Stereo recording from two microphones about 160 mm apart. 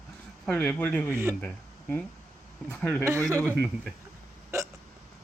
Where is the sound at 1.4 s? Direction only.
10° left (ahead or behind).